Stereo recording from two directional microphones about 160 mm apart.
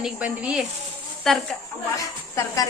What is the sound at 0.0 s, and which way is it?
Speech, 5° right (ahead or behind).